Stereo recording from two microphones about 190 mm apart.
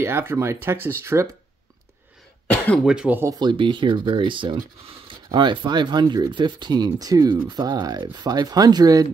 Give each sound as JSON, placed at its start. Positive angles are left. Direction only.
{"t": 0.0, "sound": "speech", "side_deg": -15}
{"t": 2.5, "sound": "speech", "side_deg": 10}
{"t": 2.8, "sound": "speech", "side_deg": -5}